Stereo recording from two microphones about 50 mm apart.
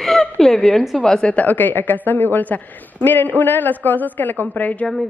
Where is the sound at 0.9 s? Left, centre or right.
Centre.